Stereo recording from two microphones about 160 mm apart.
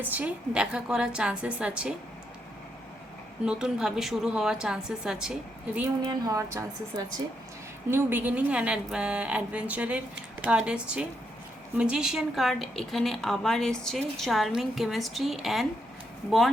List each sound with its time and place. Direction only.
0.0 s a woman's voice: 10° right (ahead or behind)
3.4 s a woman's voice: 5° right (ahead or behind)
6.1 s a woman's voice: 20° right (ahead or behind); by 15.6 s centre (ahead or behind)